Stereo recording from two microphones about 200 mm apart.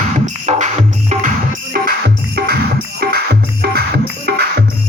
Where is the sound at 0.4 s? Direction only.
35° right (ahead or behind).